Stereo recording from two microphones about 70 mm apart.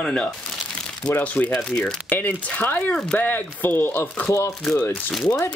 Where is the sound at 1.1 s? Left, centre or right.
Left.